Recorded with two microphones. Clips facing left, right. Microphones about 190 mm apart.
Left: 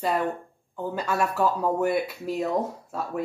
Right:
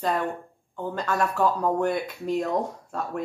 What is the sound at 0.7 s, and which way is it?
A woman's voice, 10° left (ahead or behind).